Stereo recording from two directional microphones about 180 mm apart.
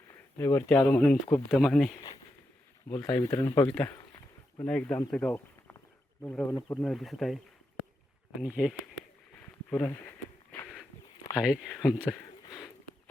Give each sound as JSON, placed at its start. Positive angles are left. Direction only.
{"t": 0.1, "sound": "speech", "side_deg": 15}
{"t": 3.7, "sound": "speech", "side_deg": 5}
{"t": 3.9, "sound": "a sound", "side_deg": 20}
{"t": 4.6, "sound": "speech", "side_deg": 5}
{"t": 8.4, "sound": "speech", "side_deg": -5}
{"t": 11.3, "sound": "speech", "side_deg": 0}